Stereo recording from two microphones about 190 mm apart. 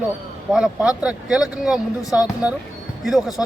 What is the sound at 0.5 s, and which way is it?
Speech, centre (ahead or behind).